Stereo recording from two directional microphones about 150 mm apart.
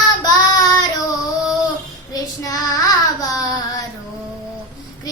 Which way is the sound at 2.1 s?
25° left (ahead or behind).